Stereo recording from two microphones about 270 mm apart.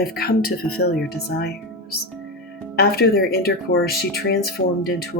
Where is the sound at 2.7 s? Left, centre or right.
Left.